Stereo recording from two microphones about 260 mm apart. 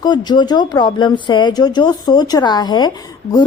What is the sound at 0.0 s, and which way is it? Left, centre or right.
A woman's voice, centre.